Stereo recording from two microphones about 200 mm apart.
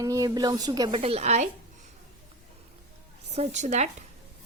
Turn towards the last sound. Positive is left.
turn(degrees=-35)  # may be behind; listen again after turning